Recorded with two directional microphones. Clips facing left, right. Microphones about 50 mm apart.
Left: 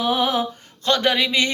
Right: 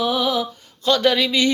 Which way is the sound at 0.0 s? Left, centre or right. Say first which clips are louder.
Even; left.